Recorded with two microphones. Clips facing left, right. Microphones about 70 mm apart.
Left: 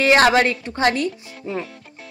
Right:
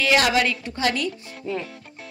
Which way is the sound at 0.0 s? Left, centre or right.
Left.